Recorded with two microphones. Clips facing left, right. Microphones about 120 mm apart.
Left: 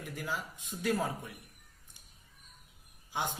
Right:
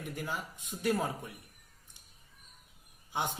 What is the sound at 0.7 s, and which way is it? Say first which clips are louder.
Speech: right 1 dB; 10° right (ahead or behind).